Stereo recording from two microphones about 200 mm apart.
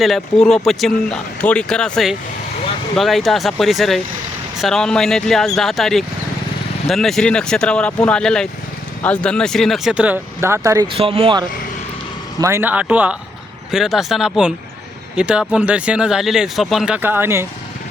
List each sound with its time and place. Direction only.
0.0 s speech: centre (ahead or behind); by 10.8 s 15° right (ahead or behind)
10.9 s speech: 30° right (ahead or behind)
12.4 s speech: 15° right (ahead or behind)